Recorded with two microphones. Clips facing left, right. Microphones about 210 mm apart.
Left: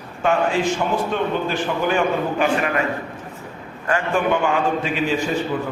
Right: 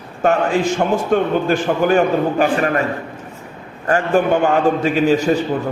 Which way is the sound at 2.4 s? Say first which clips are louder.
Right 3 dB; 40° right (ahead or behind).